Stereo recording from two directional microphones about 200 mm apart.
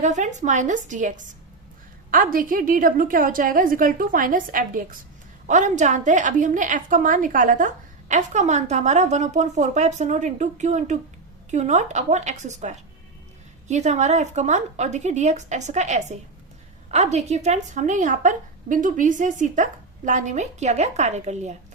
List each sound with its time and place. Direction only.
0.0 s a woman's voice: 35° right (ahead or behind)